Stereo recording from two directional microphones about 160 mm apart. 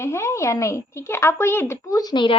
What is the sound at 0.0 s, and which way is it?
A child's voice, 15° left (ahead or behind).